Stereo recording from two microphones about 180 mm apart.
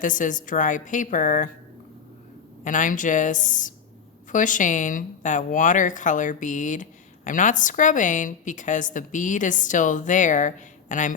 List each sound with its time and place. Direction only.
0.0 s a woman's voice: 45° left (ahead or behind)
2.6 s a woman's voice: 45° left (ahead or behind)